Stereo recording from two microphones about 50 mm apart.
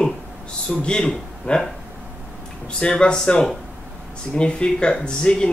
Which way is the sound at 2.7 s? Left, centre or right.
Centre.